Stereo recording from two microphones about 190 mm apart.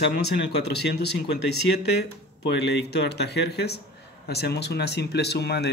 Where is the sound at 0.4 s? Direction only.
60° left (ahead or behind).